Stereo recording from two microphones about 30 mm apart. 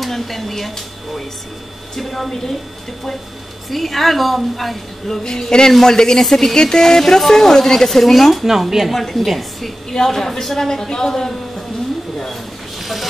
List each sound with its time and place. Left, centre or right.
0.0 s speech: centre
3.7 s a woman's voice: centre
5.2 s speech: left
8.0 s a woman's voice: centre
8.9 s a woman's voice: centre
9.8 s speech: centre
12.8 s vehicle: centre